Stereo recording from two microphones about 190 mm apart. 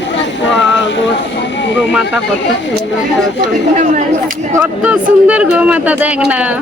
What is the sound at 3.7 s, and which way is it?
Speech, 40° right (ahead or behind).